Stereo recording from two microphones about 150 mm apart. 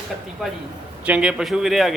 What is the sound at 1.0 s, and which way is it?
Speech, 5° right (ahead or behind).